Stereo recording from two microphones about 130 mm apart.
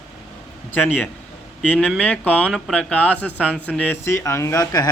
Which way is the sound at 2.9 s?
10° left (ahead or behind).